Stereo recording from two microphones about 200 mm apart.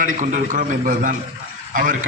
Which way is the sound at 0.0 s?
40° right (ahead or behind).